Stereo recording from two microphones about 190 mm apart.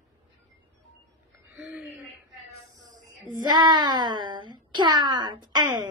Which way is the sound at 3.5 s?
25° right (ahead or behind).